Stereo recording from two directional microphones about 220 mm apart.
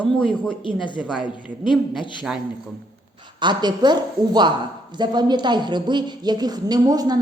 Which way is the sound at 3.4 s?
20° right (ahead or behind).